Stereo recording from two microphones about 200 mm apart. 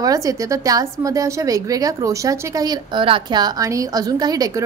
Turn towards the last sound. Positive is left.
turn(degrees=-20)  # may be behind; listen again after turning